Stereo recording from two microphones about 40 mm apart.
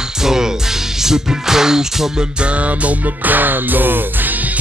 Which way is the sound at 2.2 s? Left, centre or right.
Right.